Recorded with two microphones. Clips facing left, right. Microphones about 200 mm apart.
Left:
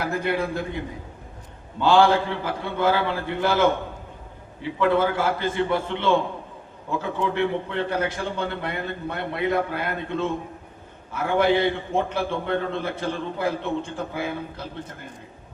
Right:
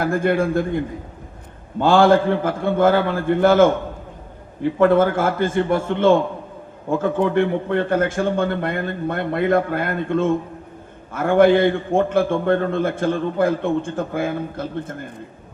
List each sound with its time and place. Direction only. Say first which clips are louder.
0.0 s a man's voice: right 6 dB; 50° right (ahead or behind)
1.8 s a man's voice: right 4 dB; 50° right (ahead or behind)